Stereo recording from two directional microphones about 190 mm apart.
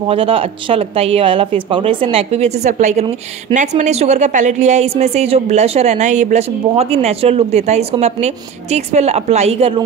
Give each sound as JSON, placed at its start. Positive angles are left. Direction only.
{"t": 0.1, "sound": "a woman's voice", "side_deg": -30}